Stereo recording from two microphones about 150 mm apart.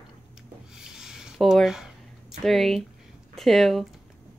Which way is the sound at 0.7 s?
5° right (ahead or behind).